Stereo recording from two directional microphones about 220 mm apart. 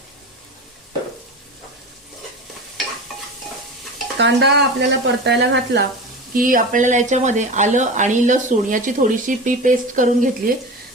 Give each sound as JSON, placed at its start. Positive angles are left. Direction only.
{"t": 4.2, "sound": "speech", "side_deg": -50}
{"t": 6.3, "sound": "speech", "side_deg": -40}